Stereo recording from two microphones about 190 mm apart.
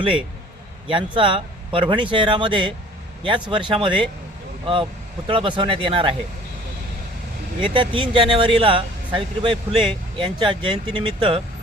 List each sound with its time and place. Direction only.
0.9 s a man's voice: 25° right (ahead or behind)
7.6 s a man's voice: 25° right (ahead or behind)